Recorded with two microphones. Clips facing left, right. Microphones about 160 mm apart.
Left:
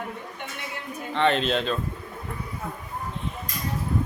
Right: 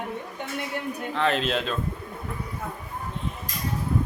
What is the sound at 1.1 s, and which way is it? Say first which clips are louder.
Speech: left 3 dB; centre (ahead or behind).